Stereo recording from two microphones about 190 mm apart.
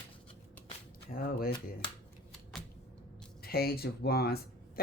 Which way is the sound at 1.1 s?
50° left (ahead or behind).